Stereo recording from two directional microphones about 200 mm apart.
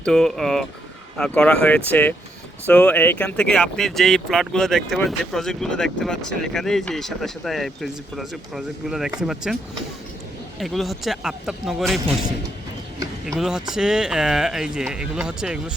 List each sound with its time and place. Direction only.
0.0 s speech: centre (ahead or behind)
10.6 s speech: centre (ahead or behind)
13.2 s speech: 5° right (ahead or behind)